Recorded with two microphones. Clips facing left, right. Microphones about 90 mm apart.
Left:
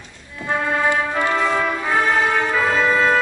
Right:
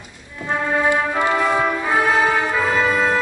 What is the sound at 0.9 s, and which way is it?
Music, 15° right (ahead or behind).